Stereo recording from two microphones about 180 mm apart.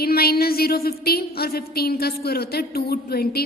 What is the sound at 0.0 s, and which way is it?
A woman's voice, 60° left (ahead or behind).